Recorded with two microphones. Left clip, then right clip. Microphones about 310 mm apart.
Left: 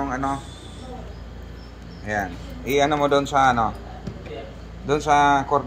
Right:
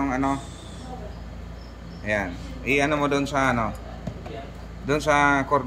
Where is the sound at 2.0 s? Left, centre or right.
Centre.